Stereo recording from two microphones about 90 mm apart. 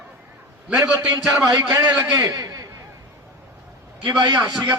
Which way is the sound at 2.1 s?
40° right (ahead or behind).